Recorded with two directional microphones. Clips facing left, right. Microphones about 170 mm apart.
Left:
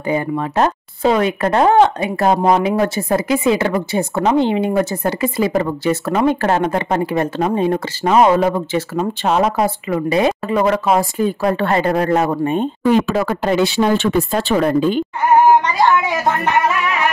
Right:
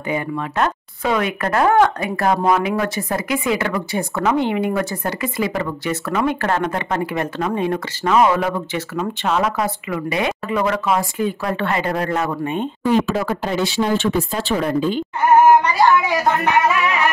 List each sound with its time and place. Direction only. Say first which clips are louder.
0.1 s speech: left 4 dB; 35° left (ahead or behind)
12.8 s speech: left 2 dB; 65° left (ahead or behind)